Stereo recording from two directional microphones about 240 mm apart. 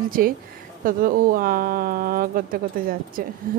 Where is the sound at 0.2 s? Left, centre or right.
Right.